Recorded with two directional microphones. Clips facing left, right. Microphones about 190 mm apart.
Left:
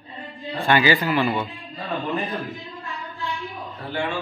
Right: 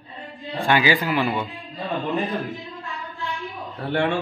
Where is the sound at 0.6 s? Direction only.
10° right (ahead or behind).